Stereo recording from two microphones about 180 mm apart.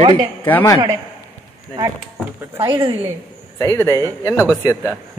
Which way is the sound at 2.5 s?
30° right (ahead or behind).